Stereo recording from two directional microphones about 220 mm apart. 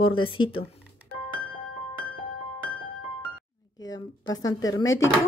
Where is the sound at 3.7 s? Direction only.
15° left (ahead or behind).